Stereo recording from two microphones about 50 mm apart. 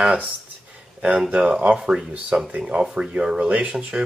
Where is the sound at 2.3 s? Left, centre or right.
Right.